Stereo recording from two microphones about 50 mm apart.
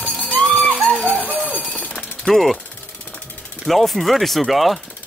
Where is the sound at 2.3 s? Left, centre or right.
Centre.